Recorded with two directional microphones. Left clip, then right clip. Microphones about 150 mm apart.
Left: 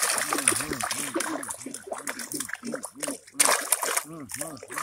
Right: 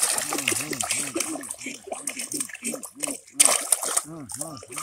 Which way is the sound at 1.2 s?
5° right (ahead or behind).